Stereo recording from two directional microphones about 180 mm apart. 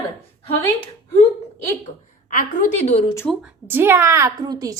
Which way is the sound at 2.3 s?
45° left (ahead or behind).